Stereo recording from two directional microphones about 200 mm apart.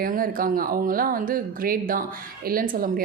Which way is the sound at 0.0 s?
45° right (ahead or behind).